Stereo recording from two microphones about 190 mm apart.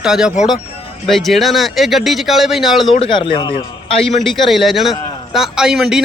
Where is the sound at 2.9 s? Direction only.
30° left (ahead or behind).